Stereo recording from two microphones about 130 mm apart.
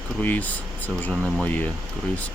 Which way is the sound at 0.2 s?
15° left (ahead or behind).